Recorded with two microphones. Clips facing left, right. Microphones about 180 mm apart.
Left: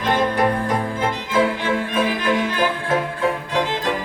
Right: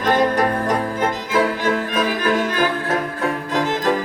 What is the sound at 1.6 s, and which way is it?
Music, 40° right (ahead or behind).